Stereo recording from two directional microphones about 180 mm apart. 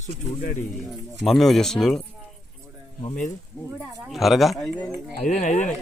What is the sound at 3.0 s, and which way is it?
Speech, 45° left (ahead or behind).